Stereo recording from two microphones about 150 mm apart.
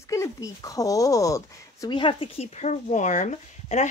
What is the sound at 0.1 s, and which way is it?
Speech, 20° left (ahead or behind).